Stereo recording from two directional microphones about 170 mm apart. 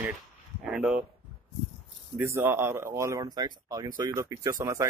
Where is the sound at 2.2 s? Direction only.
15° right (ahead or behind).